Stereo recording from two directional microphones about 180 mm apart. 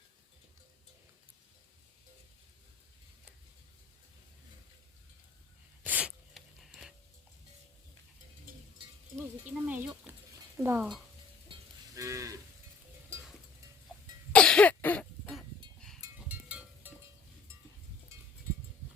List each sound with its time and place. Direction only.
5.8 s sneeze: 10° right (ahead or behind)
9.1 s a sound: 10° right (ahead or behind)
10.6 s speech: 10° right (ahead or behind)
11.9 s cattle: 15° right (ahead or behind)
14.3 s cough: 5° left (ahead or behind)
16.0 s a sound: 10° right (ahead or behind)